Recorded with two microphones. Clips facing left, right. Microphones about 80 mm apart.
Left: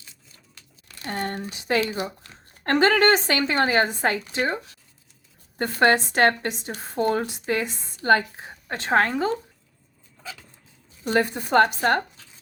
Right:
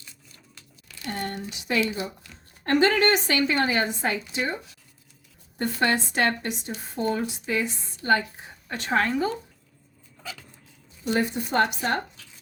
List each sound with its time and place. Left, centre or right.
0.9 s speech: left
4.0 s speech: left
8.8 s speech: left
11.0 s a woman's voice: left